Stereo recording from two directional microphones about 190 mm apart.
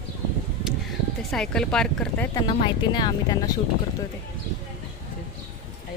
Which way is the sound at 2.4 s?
20° left (ahead or behind).